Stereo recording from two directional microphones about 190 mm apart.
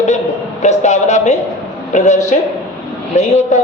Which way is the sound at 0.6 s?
40° left (ahead or behind).